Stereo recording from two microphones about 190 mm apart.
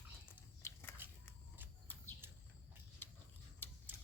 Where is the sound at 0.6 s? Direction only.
10° left (ahead or behind).